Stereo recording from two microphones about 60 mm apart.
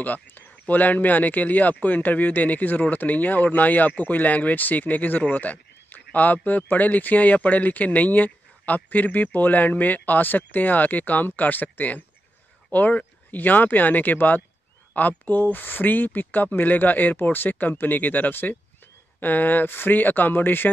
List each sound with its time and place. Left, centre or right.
0.0 s speech: left